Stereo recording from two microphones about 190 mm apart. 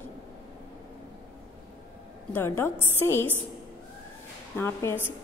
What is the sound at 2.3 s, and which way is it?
A woman's voice, 10° left (ahead or behind).